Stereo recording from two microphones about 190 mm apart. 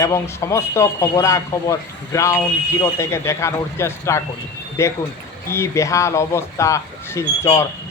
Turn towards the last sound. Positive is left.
turn(degrees=15)  # may be behind; listen again after turning